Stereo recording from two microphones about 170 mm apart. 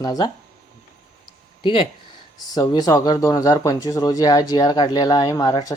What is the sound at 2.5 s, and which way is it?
Speech, 25° left (ahead or behind).